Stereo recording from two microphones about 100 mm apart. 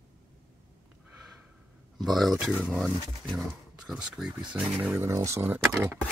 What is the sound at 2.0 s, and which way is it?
Speech, centre (ahead or behind).